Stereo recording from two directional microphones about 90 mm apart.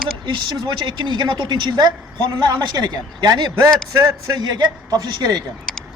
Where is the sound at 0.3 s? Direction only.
55° right (ahead or behind).